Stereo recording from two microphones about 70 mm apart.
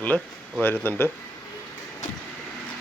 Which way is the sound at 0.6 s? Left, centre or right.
Left.